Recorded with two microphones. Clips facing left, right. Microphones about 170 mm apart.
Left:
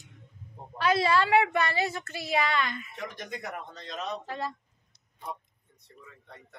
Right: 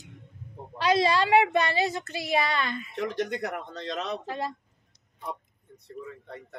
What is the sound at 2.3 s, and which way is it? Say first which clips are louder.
Speech: right 1 dB; 35° right (ahead or behind).